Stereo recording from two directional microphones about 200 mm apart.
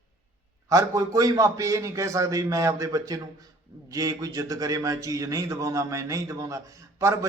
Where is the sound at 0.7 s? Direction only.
15° right (ahead or behind).